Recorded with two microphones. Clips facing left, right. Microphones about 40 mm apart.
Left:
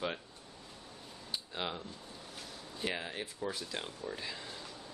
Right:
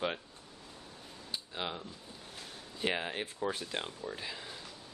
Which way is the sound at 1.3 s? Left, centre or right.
Centre.